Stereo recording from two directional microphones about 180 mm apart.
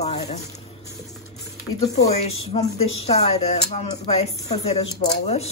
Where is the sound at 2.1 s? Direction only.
35° left (ahead or behind).